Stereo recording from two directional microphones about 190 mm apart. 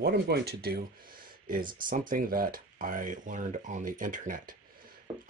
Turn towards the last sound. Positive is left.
turn(degrees=-45)  # may be behind; listen again after turning